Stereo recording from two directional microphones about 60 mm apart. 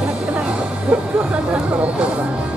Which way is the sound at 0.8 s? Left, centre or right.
Right.